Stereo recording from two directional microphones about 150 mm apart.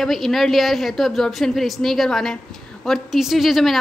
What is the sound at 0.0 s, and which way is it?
A woman's voice, centre (ahead or behind).